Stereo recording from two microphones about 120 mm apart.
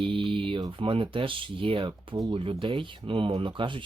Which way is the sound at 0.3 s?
45° right (ahead or behind).